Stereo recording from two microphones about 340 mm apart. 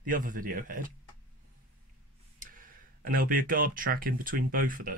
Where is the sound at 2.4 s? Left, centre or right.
Right.